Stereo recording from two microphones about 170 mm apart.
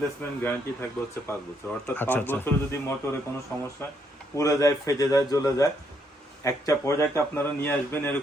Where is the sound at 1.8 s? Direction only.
10° left (ahead or behind).